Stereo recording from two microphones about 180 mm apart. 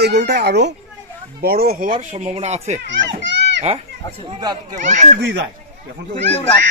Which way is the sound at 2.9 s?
80° right.